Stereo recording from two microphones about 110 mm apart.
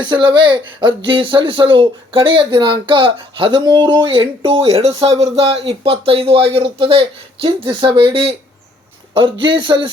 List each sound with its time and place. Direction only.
0.0 s speech: 45° right (ahead or behind); by 4.9 s 70° right (ahead or behind)
4.9 s speech: 35° right (ahead or behind)
5.1 s speech: 80° right; by 9.9 s 50° right (ahead or behind)